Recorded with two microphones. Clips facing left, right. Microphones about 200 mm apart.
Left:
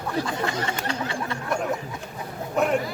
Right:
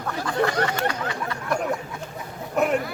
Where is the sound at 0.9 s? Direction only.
25° left (ahead or behind).